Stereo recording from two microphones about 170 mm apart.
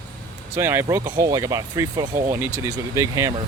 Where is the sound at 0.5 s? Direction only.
15° right (ahead or behind).